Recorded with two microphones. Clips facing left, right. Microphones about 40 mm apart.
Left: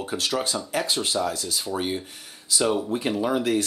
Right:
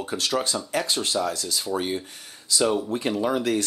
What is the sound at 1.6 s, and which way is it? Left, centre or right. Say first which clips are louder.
Speech: right 1 dB; centre.